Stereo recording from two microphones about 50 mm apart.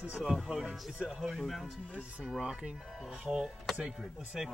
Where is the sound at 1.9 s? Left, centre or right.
Centre.